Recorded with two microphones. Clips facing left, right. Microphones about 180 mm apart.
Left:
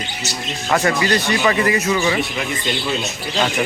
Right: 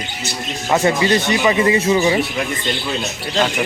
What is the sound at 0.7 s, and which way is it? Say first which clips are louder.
Speech: right 2 dB; 20° right (ahead or behind).